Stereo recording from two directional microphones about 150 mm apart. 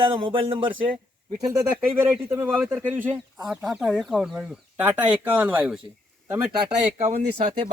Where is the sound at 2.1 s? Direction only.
10° right (ahead or behind).